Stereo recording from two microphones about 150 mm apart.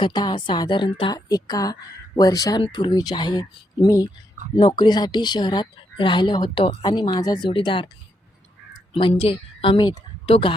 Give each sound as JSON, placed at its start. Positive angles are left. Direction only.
{"t": 0.0, "sound": "a woman's voice", "side_deg": 30}
{"t": 8.9, "sound": "a woman's voice", "side_deg": 35}